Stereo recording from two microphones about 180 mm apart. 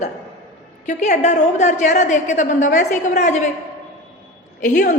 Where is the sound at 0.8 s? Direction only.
40° left (ahead or behind).